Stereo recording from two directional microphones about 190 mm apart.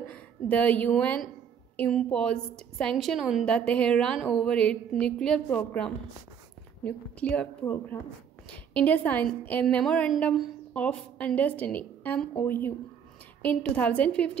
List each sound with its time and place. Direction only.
0.1 s a woman's voice: 10° left (ahead or behind)